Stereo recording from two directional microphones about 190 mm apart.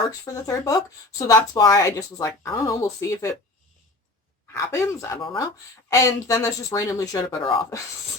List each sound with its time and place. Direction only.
0.1 s a woman's voice: 15° left (ahead or behind)
4.5 s a woman's voice: 15° left (ahead or behind)